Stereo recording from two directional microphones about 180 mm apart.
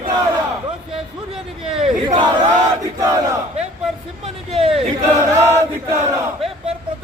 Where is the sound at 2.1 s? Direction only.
25° right (ahead or behind).